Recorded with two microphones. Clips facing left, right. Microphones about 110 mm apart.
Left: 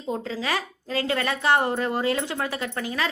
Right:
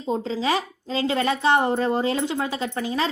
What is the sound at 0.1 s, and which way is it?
A woman's voice, 25° right (ahead or behind).